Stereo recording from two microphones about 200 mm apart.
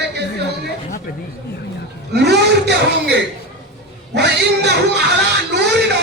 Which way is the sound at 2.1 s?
55° right (ahead or behind).